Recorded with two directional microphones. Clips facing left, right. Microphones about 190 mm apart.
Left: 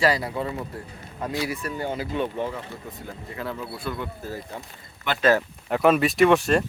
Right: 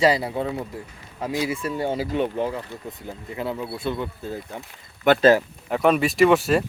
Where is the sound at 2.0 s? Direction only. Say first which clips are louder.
Right 3 dB; 15° right (ahead or behind).